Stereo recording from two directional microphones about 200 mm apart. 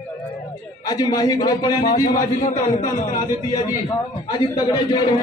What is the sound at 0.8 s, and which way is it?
A man's voice, 20° left (ahead or behind).